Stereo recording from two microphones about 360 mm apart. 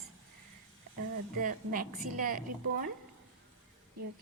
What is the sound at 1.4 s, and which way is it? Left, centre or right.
Speech, right.